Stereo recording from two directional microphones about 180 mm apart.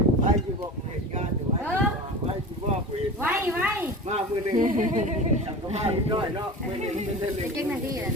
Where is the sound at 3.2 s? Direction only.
10° right (ahead or behind).